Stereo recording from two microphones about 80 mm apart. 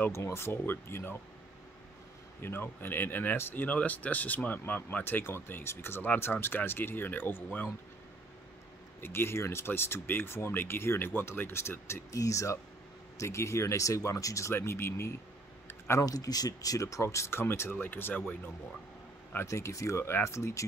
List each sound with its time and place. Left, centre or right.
0.1 s speech: left
2.4 s speech: left
9.0 s speech: left
15.9 s speech: left
19.3 s speech: left